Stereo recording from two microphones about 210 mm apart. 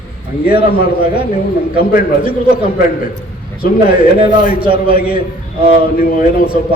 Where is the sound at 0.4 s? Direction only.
45° left (ahead or behind).